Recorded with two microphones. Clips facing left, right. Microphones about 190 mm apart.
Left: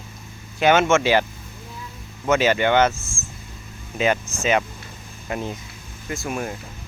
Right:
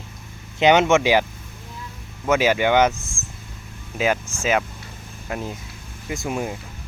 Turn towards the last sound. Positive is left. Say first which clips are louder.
# right 1 dB
turn(degrees=-20)  # may be behind; listen again after turning